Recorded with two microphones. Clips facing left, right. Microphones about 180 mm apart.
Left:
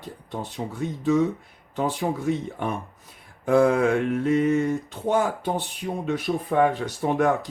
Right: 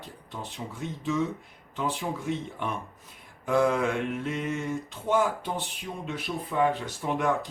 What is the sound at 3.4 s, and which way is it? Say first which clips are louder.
Mantra: left 6 dB; 40° left (ahead or behind).